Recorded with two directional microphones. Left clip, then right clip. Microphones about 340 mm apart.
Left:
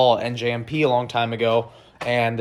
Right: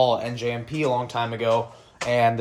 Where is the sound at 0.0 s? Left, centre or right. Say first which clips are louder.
Left 3 dB; centre.